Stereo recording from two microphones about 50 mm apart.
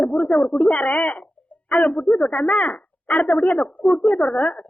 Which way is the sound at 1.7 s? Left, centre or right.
Left.